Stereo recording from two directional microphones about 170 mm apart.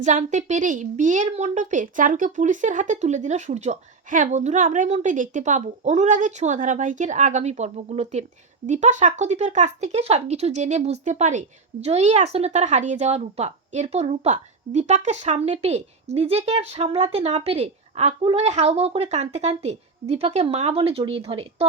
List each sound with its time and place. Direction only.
0.0 s a woman's voice: 45° right (ahead or behind)